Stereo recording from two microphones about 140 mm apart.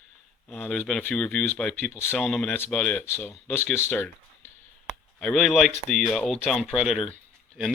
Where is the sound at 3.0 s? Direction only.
15° left (ahead or behind).